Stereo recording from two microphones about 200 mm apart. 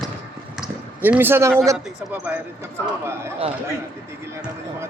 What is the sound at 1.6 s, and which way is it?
A man's voice, 15° right (ahead or behind).